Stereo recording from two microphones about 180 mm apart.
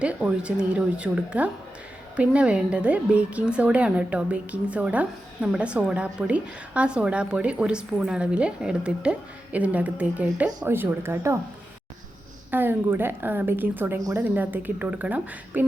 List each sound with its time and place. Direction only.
0.0 s a woman's voice: 5° right (ahead or behind)
12.5 s a woman's voice: 10° right (ahead or behind)